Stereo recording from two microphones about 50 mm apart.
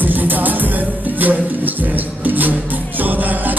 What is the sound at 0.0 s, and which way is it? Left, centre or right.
Music, right.